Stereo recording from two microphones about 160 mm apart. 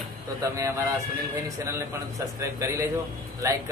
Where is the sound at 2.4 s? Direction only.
20° right (ahead or behind).